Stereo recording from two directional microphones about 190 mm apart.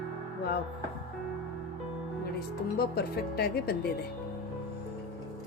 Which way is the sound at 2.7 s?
55° left (ahead or behind).